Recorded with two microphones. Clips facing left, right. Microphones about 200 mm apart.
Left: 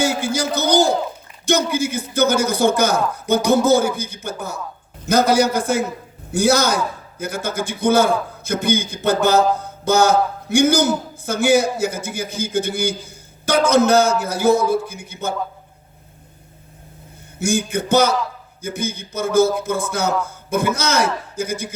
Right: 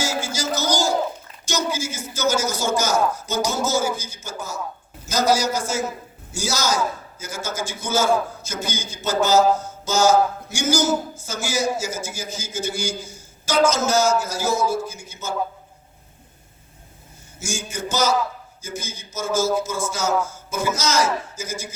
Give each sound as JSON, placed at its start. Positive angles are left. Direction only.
{"t": 0.0, "sound": "a man's voice", "side_deg": 60}
{"t": 17.3, "sound": "a man's voice", "side_deg": 60}